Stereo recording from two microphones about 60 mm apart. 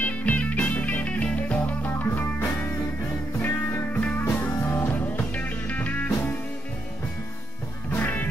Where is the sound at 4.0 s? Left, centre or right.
Left.